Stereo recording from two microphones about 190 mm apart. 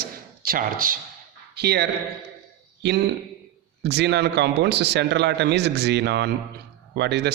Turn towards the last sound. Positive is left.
turn(degrees=-65)  # may be behind; listen again after turning